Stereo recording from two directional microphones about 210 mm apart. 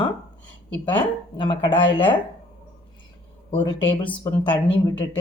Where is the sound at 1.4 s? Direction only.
20° left (ahead or behind).